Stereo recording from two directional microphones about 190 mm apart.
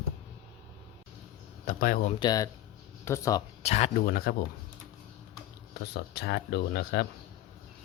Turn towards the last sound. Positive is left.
turn(degrees=55)  # may be behind; listen again after turning